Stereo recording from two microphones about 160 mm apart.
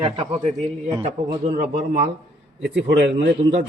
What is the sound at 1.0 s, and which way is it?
A man's voice, 45° right (ahead or behind).